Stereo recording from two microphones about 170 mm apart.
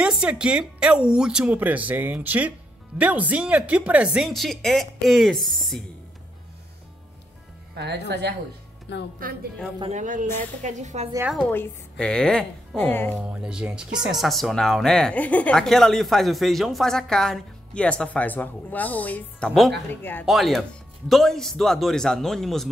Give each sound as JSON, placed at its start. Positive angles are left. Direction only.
{"t": 0.0, "sound": "speech", "side_deg": -5}
{"t": 7.7, "sound": "speech", "side_deg": -80}
{"t": 8.9, "sound": "a woman's voice", "side_deg": 90}
{"t": 9.8, "sound": "speech", "side_deg": -40}
{"t": 11.5, "sound": "a woman's voice", "side_deg": 10}
{"t": 13.1, "sound": "a woman's voice", "side_deg": -5}
{"t": 20.2, "sound": "speech", "side_deg": 0}